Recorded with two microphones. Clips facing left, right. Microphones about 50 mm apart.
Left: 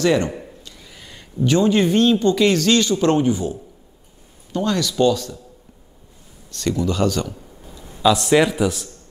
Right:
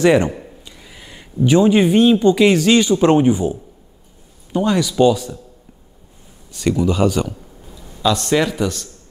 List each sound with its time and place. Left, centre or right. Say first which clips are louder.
0.0 s a man's voice: right 4 dB; right
6.5 s speech: right 4 dB; centre
7.6 s a man's voice: left 2 dB; centre